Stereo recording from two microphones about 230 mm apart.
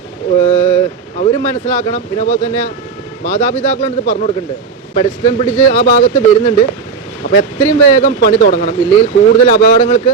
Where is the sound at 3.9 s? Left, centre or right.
Left.